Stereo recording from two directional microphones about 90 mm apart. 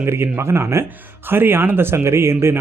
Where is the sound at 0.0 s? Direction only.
30° right (ahead or behind).